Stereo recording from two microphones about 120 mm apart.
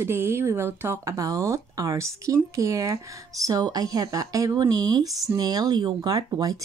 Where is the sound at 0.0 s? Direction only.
20° right (ahead or behind).